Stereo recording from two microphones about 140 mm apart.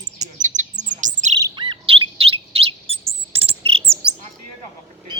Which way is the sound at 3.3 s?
45° right (ahead or behind).